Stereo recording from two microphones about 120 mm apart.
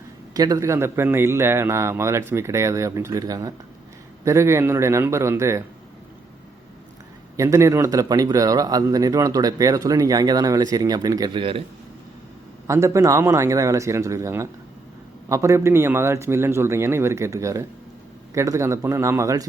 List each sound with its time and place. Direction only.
0.3 s a man's voice: 30° right (ahead or behind)
7.3 s speech: 25° right (ahead or behind)
11.3 s a man's voice: 50° right (ahead or behind)
12.6 s a man's voice: 25° right (ahead or behind)